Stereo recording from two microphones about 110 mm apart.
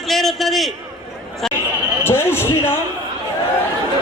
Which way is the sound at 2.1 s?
20° left (ahead or behind).